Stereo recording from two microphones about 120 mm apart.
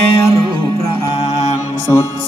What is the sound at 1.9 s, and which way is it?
Music, 30° left (ahead or behind).